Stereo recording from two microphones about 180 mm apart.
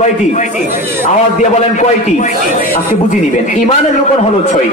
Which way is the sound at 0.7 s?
15° right (ahead or behind).